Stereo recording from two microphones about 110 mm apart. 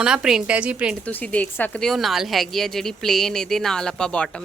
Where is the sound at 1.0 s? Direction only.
10° left (ahead or behind).